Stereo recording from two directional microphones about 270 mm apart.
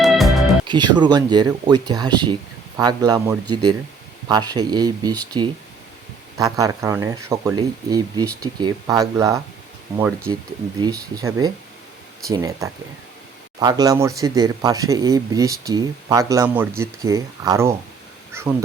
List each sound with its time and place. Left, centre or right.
0.0 s music: centre
0.7 s speech: centre
6.3 s speech: centre
10.0 s speech: centre
10.8 s speech: centre
18.3 s a sound: centre